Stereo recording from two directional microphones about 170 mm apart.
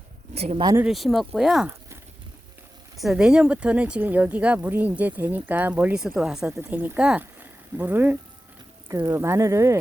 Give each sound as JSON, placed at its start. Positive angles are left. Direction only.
{"t": 0.3, "sound": "speech", "side_deg": -35}
{"t": 0.8, "sound": "speech", "side_deg": 0}
{"t": 3.0, "sound": "speech", "side_deg": -5}